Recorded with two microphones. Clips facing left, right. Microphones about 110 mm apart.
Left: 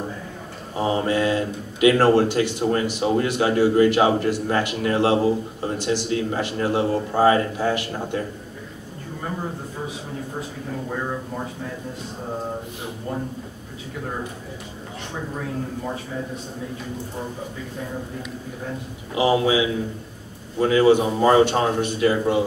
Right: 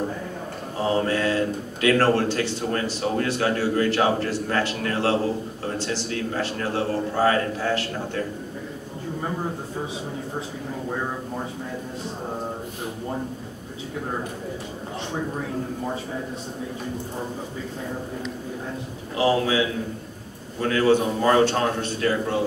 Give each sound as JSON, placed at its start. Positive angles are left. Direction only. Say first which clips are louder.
{"t": 0.7, "sound": "speech", "louder": "left 2 dB", "side_deg": 15}
{"t": 19.1, "sound": "speech", "louder": "left 2 dB", "side_deg": 15}